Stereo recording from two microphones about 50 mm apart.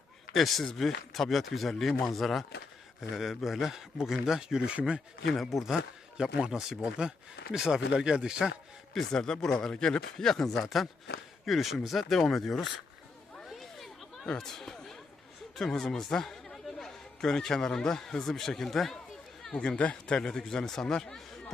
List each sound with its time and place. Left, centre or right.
0.3 s speech: centre
5.4 s speech: centre
9.0 s speech: centre
10.5 s speech: centre
13.5 s a sound: centre
15.5 s speech: centre
19.5 s a man's voice: left